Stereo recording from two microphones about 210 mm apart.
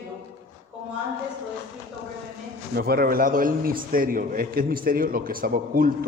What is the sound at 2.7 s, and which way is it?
A man's voice, 45° right (ahead or behind).